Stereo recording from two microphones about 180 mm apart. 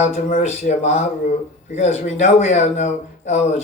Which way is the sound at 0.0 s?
40° left (ahead or behind).